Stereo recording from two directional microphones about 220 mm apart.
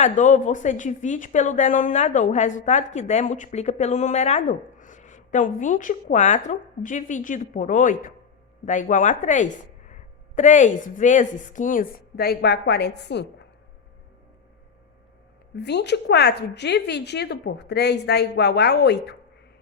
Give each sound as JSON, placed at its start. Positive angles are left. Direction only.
{"t": 0.0, "sound": "a woman's voice", "side_deg": 35}
{"t": 15.5, "sound": "a woman's voice", "side_deg": 50}